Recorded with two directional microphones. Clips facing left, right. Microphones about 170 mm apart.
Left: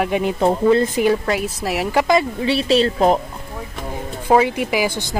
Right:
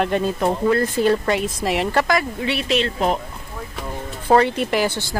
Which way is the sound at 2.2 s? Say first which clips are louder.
Left 4 dB; 30° left (ahead or behind).